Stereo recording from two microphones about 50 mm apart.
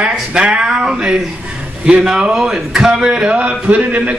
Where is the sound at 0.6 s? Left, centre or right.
Centre.